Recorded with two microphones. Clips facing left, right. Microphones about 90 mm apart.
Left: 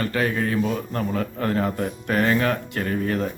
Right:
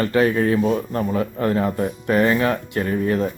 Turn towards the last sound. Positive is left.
turn(degrees=-20)  # may be behind; listen again after turning